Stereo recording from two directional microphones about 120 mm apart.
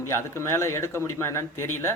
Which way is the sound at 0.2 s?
20° left (ahead or behind).